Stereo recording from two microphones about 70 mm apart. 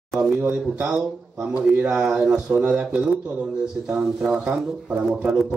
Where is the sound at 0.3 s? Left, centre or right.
Right.